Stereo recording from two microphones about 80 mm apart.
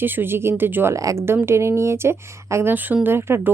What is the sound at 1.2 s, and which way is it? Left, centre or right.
Speech, right.